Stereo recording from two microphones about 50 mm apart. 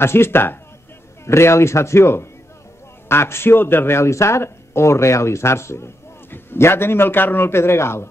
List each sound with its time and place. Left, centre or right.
0.0 s speech: left
1.2 s speech: left
6.3 s speech: left